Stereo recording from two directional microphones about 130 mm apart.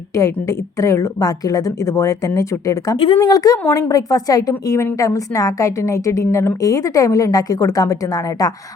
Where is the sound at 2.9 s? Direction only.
40° left (ahead or behind).